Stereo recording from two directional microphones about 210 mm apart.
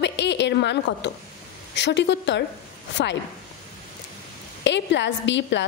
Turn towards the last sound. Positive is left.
turn(degrees=60)  # may be behind; listen again after turning